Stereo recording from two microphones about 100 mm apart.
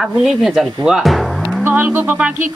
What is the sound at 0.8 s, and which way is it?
Music, 5° right (ahead or behind).